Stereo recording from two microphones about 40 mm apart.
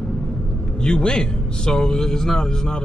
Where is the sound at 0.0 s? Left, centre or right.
Left.